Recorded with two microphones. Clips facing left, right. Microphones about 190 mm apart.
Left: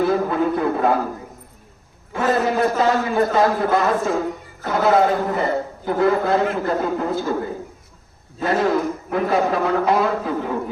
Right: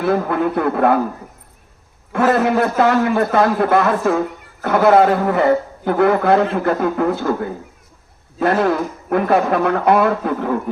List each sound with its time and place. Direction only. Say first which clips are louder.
0.0 s a man's voice: right 1 dB; 60° right (ahead or behind)
2.1 s a man's voice: right 4 dB; 65° right (ahead or behind)
8.4 s a man's voice: right 3 dB; 60° right (ahead or behind)